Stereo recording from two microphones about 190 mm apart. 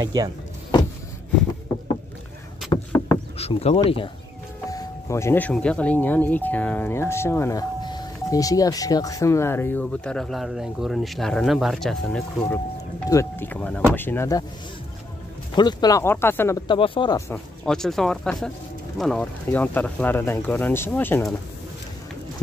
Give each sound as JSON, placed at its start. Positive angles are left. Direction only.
{"t": 0.0, "sound": "speech", "side_deg": -20}
{"t": 2.7, "sound": "vehicle", "side_deg": 30}
{"t": 4.6, "sound": "speech", "side_deg": 15}
{"t": 13.1, "sound": "speech", "side_deg": 15}
{"t": 15.5, "sound": "speech", "side_deg": 20}
{"t": 16.6, "sound": "speech", "side_deg": 25}
{"t": 17.3, "sound": "speech", "side_deg": 5}